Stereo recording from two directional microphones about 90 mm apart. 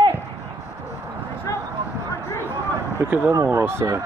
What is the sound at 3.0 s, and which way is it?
Speech, 25° right (ahead or behind).